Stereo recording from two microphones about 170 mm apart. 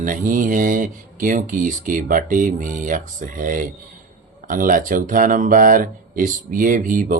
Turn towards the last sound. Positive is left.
turn(degrees=-50)  # may be behind; listen again after turning